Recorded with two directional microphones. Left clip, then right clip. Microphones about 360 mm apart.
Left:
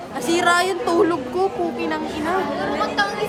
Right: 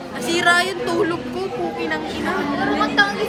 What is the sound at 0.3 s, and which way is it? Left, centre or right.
Speech, centre.